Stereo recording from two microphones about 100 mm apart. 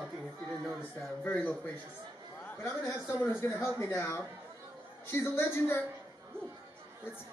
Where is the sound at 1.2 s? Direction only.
15° left (ahead or behind).